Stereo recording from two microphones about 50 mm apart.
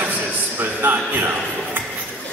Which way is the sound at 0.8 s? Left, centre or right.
Right.